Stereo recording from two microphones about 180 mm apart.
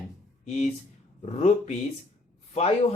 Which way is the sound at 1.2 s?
35° left (ahead or behind).